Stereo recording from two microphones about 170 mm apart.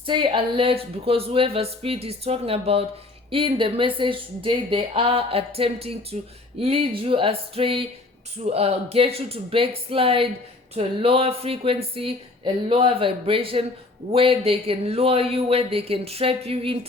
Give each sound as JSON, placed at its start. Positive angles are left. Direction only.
{"t": 0.0, "sound": "a woman's voice", "side_deg": -30}